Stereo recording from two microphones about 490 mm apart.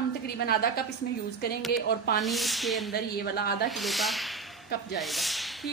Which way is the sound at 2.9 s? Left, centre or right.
Centre.